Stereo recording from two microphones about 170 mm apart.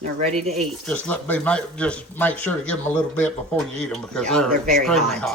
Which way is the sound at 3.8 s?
5° left (ahead or behind).